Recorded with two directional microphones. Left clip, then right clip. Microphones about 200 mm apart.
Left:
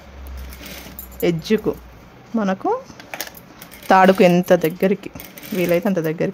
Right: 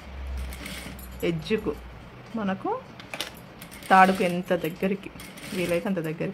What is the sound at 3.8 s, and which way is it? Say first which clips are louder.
Speech: left 6 dB; 50° left (ahead or behind).